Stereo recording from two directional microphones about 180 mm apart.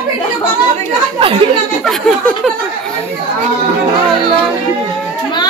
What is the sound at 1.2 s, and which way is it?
Speech, 30° right (ahead or behind).